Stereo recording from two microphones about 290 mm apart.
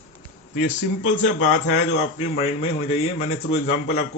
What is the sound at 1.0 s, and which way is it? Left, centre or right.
A man's voice, left.